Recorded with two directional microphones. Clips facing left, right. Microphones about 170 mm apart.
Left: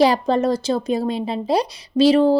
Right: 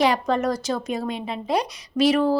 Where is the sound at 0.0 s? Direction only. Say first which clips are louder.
Left 4 dB; 30° left (ahead or behind).